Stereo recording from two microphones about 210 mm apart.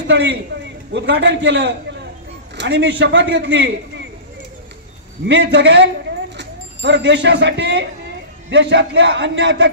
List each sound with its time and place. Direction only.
0.0 s a man's voice: 60° right (ahead or behind)
5.3 s a man's voice: 55° right (ahead or behind)